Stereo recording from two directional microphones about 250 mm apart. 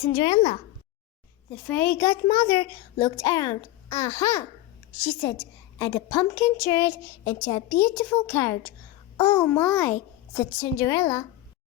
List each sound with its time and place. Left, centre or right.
0.1 s a child's voice: centre
1.6 s a child's voice: centre